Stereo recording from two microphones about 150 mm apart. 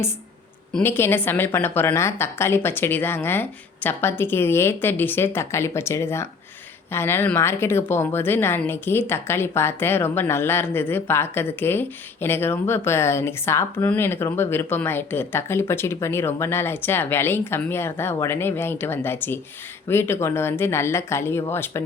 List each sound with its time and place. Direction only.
0.7 s speech: 15° left (ahead or behind)